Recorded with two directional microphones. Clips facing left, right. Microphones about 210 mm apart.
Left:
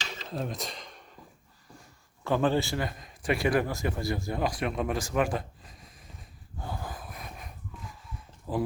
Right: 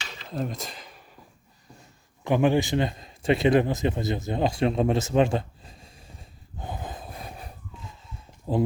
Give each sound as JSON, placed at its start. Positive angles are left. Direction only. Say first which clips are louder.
{"t": 0.3, "sound": "a sound", "louder": "right 4 dB", "side_deg": 0}
{"t": 2.2, "sound": "a man's voice", "louder": "right 4 dB", "side_deg": -15}
{"t": 6.6, "sound": "wheeze", "louder": "right 2 dB", "side_deg": -20}